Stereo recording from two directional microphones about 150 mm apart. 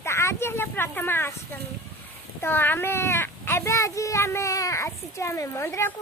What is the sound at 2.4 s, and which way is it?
A child's voice, 15° left (ahead or behind).